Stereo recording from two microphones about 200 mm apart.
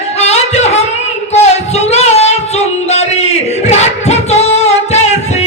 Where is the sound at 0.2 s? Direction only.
35° left (ahead or behind).